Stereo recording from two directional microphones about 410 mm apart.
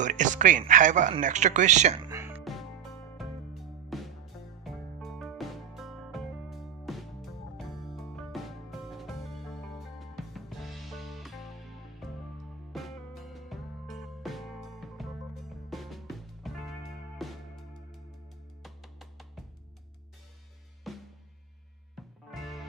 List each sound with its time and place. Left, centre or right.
0.0 s music: centre
18.6 s music: centre
20.9 s music: centre